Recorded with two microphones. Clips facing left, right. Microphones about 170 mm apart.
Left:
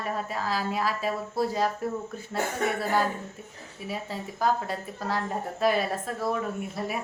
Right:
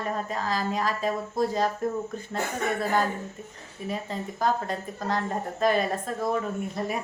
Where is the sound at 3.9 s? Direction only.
5° left (ahead or behind).